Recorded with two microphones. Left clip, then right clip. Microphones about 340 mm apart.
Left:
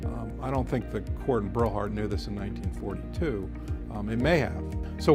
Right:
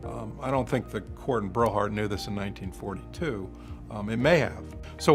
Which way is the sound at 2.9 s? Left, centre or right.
Left.